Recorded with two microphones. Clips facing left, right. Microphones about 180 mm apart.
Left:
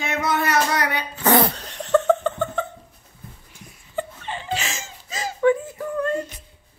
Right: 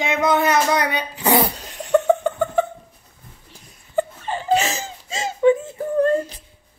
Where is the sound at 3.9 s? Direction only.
40° right (ahead or behind).